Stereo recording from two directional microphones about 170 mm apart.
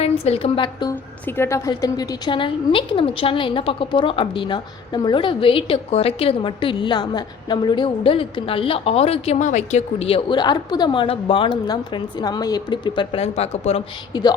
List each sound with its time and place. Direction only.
0.0 s a woman's voice: 35° left (ahead or behind)
14.1 s speech: 25° left (ahead or behind)